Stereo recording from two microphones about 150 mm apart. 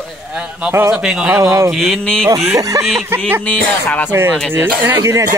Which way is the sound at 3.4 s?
10° left (ahead or behind).